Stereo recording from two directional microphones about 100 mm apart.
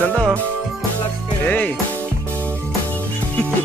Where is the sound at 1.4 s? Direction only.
15° left (ahead or behind).